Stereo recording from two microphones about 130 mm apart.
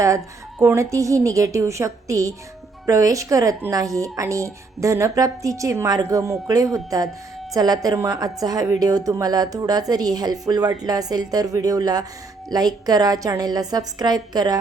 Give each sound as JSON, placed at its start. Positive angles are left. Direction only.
{"t": 0.6, "sound": "a woman's voice", "side_deg": -20}